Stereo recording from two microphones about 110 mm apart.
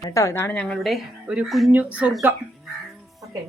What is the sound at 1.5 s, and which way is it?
Speech, centre (ahead or behind).